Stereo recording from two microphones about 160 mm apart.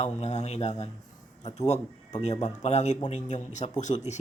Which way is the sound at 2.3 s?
45° left (ahead or behind).